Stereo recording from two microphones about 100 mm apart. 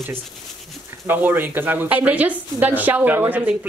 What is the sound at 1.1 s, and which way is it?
A woman's voice, 20° right (ahead or behind).